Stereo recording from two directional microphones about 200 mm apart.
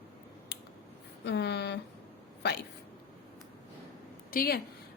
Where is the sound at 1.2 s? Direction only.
55° left (ahead or behind).